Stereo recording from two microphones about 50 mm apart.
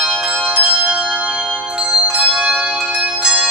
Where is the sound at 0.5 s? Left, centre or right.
Right.